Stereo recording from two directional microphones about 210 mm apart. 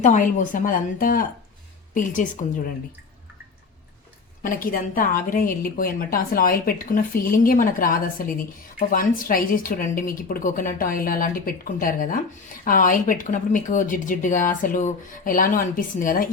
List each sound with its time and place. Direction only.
0.0 s a woman's voice: 35° left (ahead or behind)
4.4 s a woman's voice: 40° left (ahead or behind)